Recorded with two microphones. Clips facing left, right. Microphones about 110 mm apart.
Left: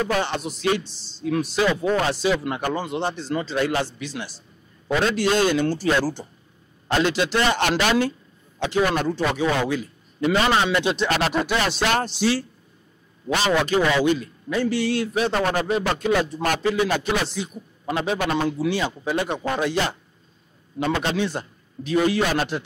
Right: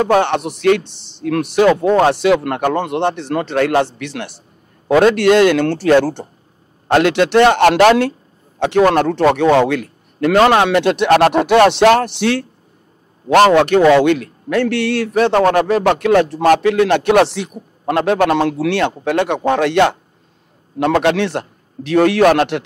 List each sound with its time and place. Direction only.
0.0 s a man's voice: 65° right (ahead or behind)